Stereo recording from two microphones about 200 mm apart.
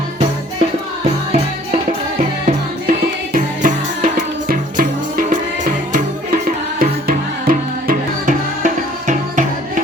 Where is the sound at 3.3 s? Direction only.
40° right (ahead or behind).